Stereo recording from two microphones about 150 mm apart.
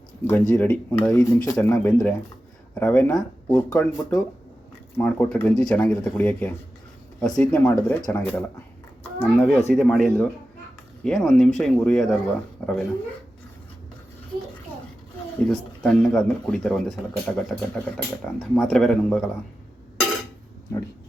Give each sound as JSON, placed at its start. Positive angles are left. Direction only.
{"t": 0.3, "sound": "speech", "side_deg": 10}
{"t": 1.2, "sound": "speech", "side_deg": 20}
{"t": 1.7, "sound": "speech", "side_deg": 5}
{"t": 15.4, "sound": "speech", "side_deg": 5}